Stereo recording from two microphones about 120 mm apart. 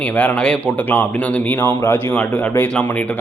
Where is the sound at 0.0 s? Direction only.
10° left (ahead or behind).